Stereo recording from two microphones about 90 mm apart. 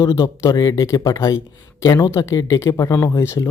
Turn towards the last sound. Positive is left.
turn(degrees=35)  # may be behind; listen again after turning